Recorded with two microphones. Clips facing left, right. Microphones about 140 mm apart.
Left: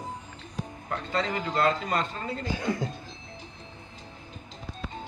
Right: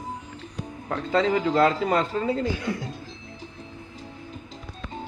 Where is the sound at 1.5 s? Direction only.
65° right (ahead or behind).